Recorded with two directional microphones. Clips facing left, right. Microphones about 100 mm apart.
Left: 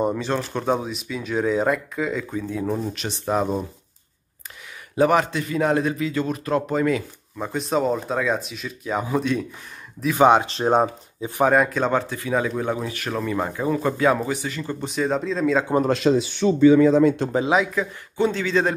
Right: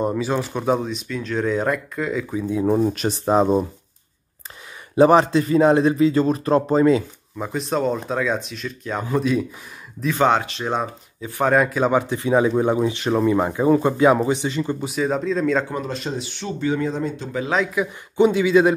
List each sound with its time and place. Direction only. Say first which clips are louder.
0.0 s speech: right 1 dB; 5° right (ahead or behind)
0.7 s speech: right 2 dB; 5° left (ahead or behind)
2.3 s speech: right 5 dB; 15° right (ahead or behind)
2.8 s a man's voice: right 8 dB; 45° right (ahead or behind)
4.9 s a man's voice: right 5 dB; 30° right (ahead or behind)
7.3 s speech: even; centre (ahead or behind)
10.1 s speech: left 3 dB; 15° left (ahead or behind)
10.4 s speech: left 5 dB; 35° left (ahead or behind)
11.1 s speech: left 2 dB; 20° left (ahead or behind)
11.4 s speech: right 1 dB; centre (ahead or behind); by 14.8 s 20° right (ahead or behind)
14.8 s speech: right 1 dB; 5° right (ahead or behind)
15.9 s speech: left 9 dB; 90° left
17.7 s speech: right 4 dB; 15° right (ahead or behind)